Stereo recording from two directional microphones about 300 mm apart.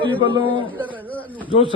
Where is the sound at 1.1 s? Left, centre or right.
Centre.